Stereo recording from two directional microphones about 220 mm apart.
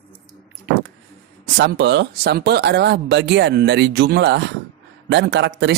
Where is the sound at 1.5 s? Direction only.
50° right (ahead or behind).